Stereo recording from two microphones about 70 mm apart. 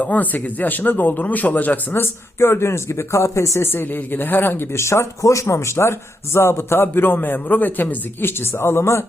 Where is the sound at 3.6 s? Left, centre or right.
Left.